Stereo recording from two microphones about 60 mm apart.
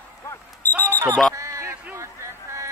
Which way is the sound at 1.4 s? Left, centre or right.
Right.